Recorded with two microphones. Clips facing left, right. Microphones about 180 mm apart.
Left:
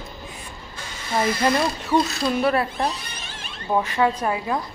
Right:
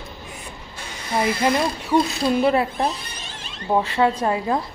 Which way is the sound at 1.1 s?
10° right (ahead or behind).